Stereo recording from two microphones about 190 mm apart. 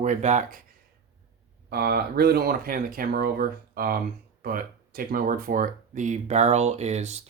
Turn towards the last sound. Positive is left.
turn(degrees=-35)  # may be behind; listen again after turning